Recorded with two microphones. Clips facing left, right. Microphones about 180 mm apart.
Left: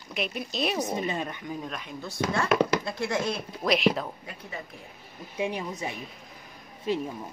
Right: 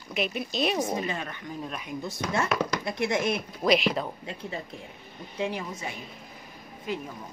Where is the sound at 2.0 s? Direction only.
20° right (ahead or behind).